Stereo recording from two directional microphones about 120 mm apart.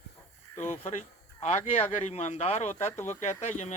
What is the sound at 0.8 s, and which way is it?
Speech, 65° left (ahead or behind).